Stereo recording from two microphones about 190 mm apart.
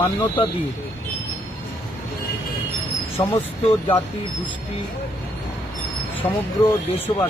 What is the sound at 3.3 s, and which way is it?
Speech, 30° left (ahead or behind).